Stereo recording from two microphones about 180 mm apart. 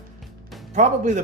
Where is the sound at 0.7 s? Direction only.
40° right (ahead or behind).